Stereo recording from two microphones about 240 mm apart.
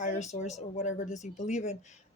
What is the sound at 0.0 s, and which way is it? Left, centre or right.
Speech, left.